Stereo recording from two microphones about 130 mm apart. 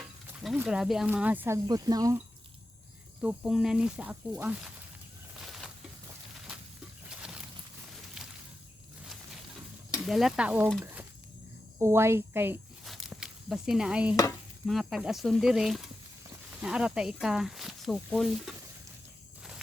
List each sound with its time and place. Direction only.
0.4 s speech: 5° right (ahead or behind)
1.5 s speech: 30° right (ahead or behind)
3.2 s speech: 5° right (ahead or behind)
5.5 s a sound: centre (ahead or behind)
7.2 s a sound: 5° right (ahead or behind)
10.0 s speech: 5° right (ahead or behind)
11.8 s speech: 20° right (ahead or behind)
12.8 s a sound: centre (ahead or behind)
14.7 s speech: centre (ahead or behind)